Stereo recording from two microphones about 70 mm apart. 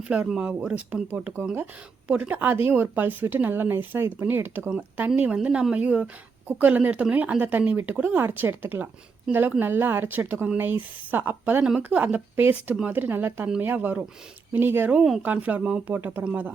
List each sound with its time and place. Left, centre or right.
0.0 s speech: centre
2.2 s speech: right